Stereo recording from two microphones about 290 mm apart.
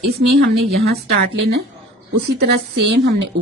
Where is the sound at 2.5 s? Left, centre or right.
Right.